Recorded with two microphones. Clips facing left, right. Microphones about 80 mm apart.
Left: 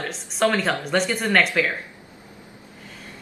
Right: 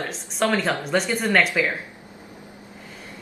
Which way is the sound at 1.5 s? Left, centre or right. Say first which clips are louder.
Even; right.